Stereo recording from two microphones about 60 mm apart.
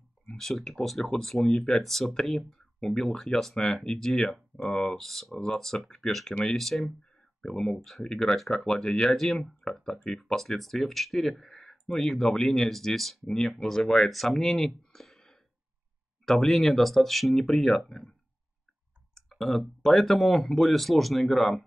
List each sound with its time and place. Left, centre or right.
0.4 s speech: centre
1.4 s speech: centre
1.7 s speech: centre
14.8 s a sound: centre
16.3 s speech: centre
19.1 s clicking: centre
19.8 s speech: centre